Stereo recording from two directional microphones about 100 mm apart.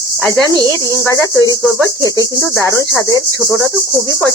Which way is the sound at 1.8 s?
30° right (ahead or behind).